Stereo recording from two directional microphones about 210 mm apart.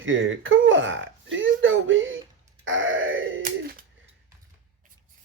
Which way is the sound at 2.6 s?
65° right (ahead or behind).